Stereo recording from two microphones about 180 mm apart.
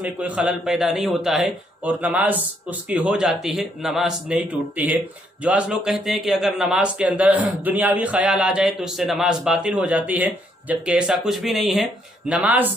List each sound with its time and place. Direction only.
0.0 s a man's voice: 5° right (ahead or behind)